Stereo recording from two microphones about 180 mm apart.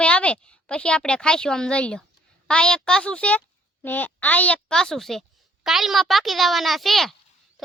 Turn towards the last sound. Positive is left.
turn(degrees=0)  # may be behind; listen again after turning